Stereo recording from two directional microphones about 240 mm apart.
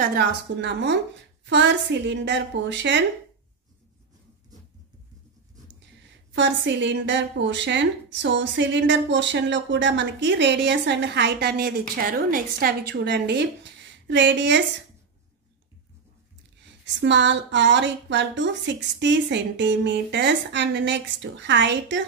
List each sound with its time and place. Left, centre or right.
0.0 s a woman's voice: right
6.3 s a woman's voice: right
16.8 s a woman's voice: right